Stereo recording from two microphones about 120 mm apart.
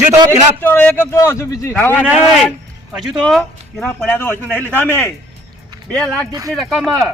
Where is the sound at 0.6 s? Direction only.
15° left (ahead or behind).